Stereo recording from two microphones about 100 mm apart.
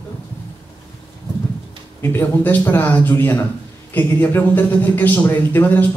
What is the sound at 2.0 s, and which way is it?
A man's voice, 25° left (ahead or behind).